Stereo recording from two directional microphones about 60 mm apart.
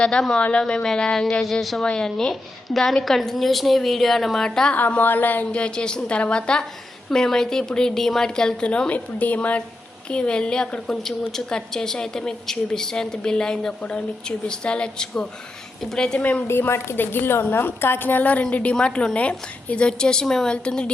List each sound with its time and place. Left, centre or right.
0.0 s a woman's voice: centre
4.7 s a sound: left
5.5 s a woman's voice: centre
16.5 s a woman's voice: left; by 20.9 s centre